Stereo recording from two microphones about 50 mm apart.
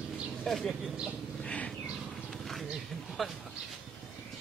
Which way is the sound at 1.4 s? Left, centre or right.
Left.